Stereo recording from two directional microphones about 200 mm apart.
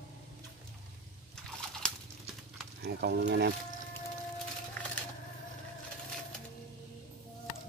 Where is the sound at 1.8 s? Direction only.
5° left (ahead or behind).